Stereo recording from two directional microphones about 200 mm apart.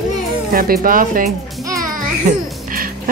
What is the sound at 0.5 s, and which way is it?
Speech, 45° right (ahead or behind).